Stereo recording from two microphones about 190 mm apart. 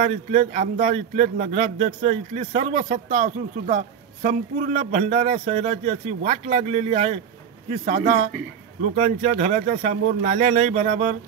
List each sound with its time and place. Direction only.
0.1 s speech: 40° right (ahead or behind)